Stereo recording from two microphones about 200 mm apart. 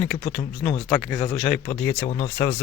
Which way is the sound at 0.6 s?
25° left (ahead or behind).